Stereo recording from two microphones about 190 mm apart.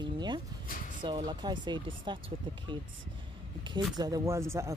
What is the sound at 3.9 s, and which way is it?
Speech, 20° right (ahead or behind).